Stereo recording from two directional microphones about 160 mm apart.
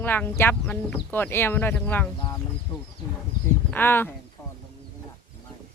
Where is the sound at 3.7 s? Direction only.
10° left (ahead or behind).